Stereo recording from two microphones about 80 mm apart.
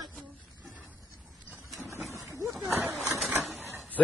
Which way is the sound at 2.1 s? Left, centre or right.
Right.